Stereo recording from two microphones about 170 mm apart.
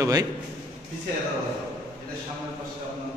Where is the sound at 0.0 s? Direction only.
20° right (ahead or behind).